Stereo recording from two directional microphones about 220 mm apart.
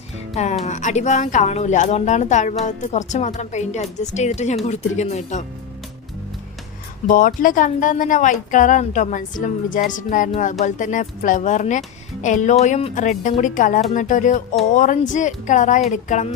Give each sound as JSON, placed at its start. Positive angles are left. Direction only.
{"t": 0.6, "sound": "a woman's voice", "side_deg": 35}
{"t": 7.1, "sound": "a woman's voice", "side_deg": 40}